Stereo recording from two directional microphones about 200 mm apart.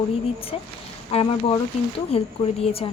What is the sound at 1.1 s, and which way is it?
Speech, 30° left (ahead or behind).